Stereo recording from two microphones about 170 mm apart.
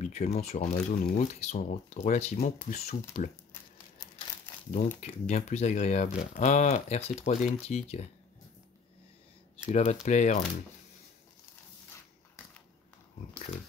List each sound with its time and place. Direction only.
0.0 s speech: 40° left (ahead or behind)
5.3 s speech: 40° left (ahead or behind)
9.7 s speech: 40° left (ahead or behind)